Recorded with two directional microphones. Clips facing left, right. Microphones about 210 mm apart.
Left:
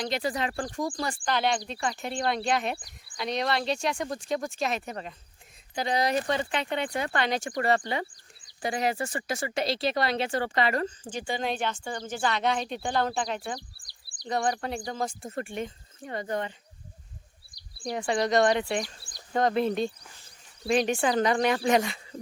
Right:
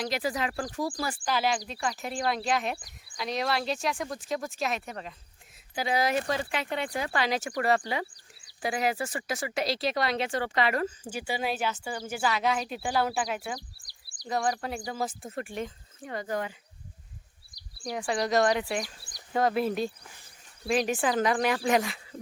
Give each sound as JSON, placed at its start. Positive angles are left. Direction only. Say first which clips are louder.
{"t": 0.0, "sound": "speech", "louder": "left 1 dB", "side_deg": -5}
{"t": 13.6, "sound": "bird", "louder": "even", "side_deg": -45}
{"t": 14.3, "sound": "speech", "louder": "left 1 dB", "side_deg": 0}
{"t": 17.8, "sound": "speech", "louder": "left 2 dB", "side_deg": 0}